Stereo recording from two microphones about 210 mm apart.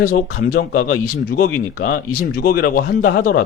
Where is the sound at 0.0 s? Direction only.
40° left (ahead or behind).